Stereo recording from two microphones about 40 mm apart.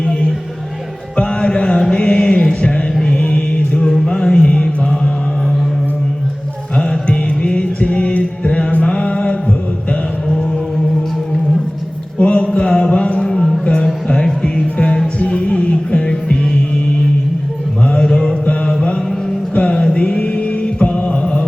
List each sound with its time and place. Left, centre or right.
1.1 s music: left
1.9 s mantra: centre
3.9 s music: centre
4.4 s mantra: left
6.7 s music: left
12.2 s mantra: left
12.5 s a sound: left
13.1 s a sound: centre
14.1 s music: centre
17.8 s mantra: centre
19.5 s music: left